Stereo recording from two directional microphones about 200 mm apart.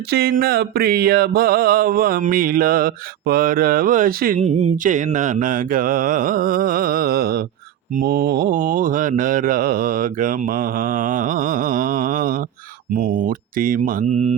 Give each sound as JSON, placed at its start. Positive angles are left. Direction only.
{"t": 0.1, "sound": "mantra", "side_deg": -50}